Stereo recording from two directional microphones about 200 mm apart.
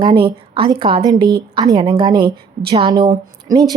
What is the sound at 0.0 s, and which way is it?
A woman's voice, 25° right (ahead or behind).